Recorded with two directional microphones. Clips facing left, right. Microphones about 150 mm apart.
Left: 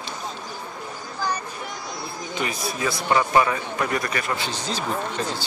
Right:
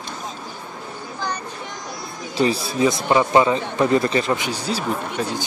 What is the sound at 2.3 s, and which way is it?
Speech, 30° right (ahead or behind).